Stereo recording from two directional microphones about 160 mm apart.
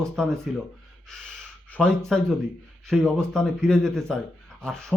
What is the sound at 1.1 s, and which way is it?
Gasp, 5° left (ahead or behind).